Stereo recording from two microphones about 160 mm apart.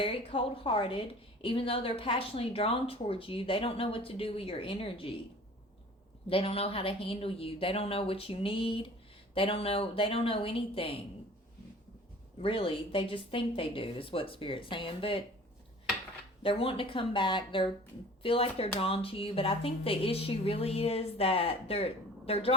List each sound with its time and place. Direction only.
0.0 s a woman's voice: 35° left (ahead or behind)
6.2 s a woman's voice: 35° left (ahead or behind)
12.4 s a woman's voice: 35° left (ahead or behind)
16.4 s a woman's voice: 35° left (ahead or behind)